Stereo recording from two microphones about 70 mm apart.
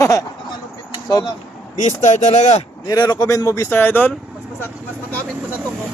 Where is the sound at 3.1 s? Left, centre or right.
Left.